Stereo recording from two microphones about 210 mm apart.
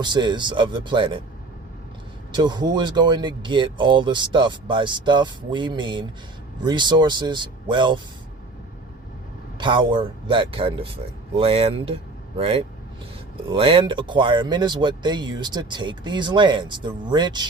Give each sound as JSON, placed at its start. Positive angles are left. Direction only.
{"t": 0.0, "sound": "speech", "side_deg": -20}
{"t": 2.3, "sound": "speech", "side_deg": -20}
{"t": 9.6, "sound": "speech", "side_deg": -25}